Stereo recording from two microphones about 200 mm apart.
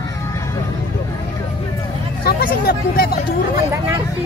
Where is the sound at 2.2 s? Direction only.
45° left (ahead or behind).